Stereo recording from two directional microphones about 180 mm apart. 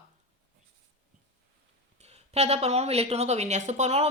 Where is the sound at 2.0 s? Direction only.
35° right (ahead or behind).